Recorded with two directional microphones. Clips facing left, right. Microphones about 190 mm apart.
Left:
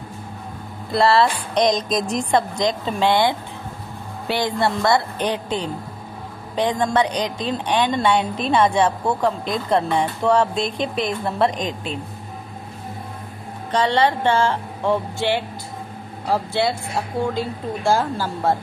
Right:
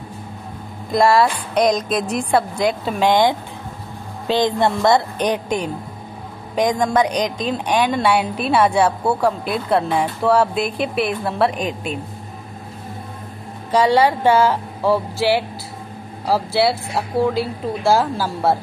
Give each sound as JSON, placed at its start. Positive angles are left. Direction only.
{"t": 0.9, "sound": "speech", "side_deg": -15}
{"t": 13.7, "sound": "speech", "side_deg": -10}
{"t": 16.3, "sound": "speech", "side_deg": -5}